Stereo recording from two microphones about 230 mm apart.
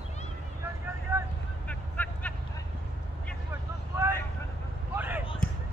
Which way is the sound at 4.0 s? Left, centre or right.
Centre.